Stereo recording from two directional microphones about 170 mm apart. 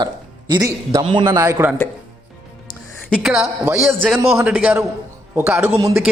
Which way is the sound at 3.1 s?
5° right (ahead or behind).